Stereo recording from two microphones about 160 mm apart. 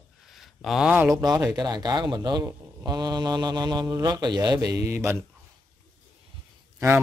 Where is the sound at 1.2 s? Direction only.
25° right (ahead or behind).